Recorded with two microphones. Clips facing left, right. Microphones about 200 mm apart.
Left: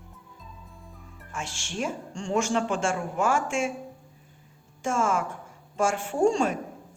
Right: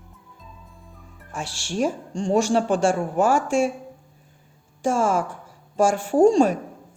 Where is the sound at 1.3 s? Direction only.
35° right (ahead or behind).